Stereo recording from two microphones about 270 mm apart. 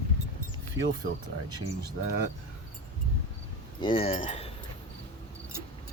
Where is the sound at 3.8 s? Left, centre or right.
Centre.